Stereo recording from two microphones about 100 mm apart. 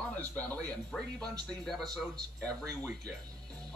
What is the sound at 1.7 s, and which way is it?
Speech, 5° left (ahead or behind).